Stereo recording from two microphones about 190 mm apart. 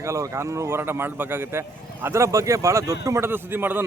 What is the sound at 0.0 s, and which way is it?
Speech, 15° right (ahead or behind).